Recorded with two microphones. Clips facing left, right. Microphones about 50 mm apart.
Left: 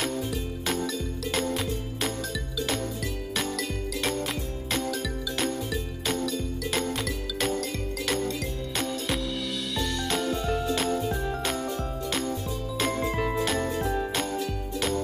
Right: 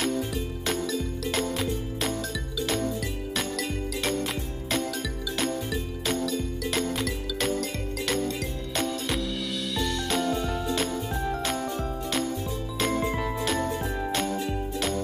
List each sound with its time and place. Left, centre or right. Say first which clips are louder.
0.7 s music: right 1 dB; centre
13.1 s jingle bell: left 1 dB; centre